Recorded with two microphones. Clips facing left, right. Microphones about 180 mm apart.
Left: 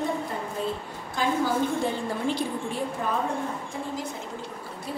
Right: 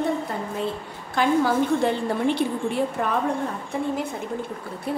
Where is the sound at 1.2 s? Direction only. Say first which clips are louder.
Right 5 dB; 70° right (ahead or behind).